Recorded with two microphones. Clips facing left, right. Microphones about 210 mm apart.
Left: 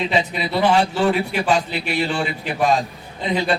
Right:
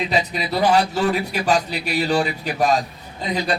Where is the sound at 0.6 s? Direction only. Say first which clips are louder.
Left 1 dB; 40° right (ahead or behind).